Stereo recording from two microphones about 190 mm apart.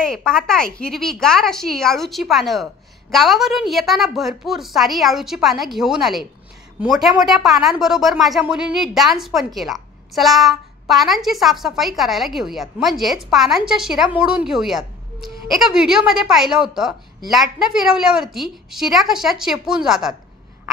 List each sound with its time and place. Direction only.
0.0 s a woman's voice: 5° left (ahead or behind)